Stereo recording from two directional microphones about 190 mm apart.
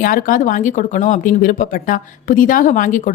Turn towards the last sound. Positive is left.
turn(degrees=40)  # may be behind; listen again after turning